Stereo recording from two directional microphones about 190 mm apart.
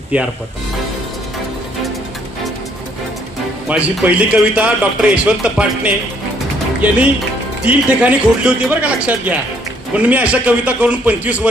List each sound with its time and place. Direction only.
0.1 s a man's voice: 10° right (ahead or behind)
3.7 s a man's voice: 5° right (ahead or behind)